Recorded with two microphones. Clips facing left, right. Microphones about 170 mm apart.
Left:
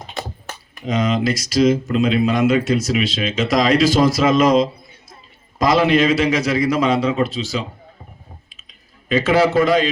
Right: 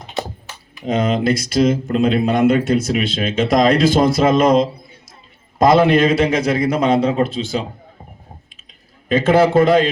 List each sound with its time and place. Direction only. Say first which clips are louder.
0.9 s a man's voice: right 2 dB; 55° right (ahead or behind)
9.0 s a man's voice: right 2 dB; 55° right (ahead or behind)